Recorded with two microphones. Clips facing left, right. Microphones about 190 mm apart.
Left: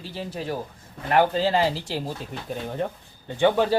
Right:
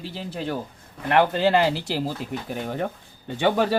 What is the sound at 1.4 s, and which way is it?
Speech, 65° right (ahead or behind).